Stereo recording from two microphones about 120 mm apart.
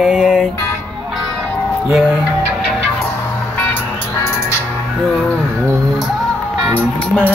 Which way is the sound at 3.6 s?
15° left (ahead or behind).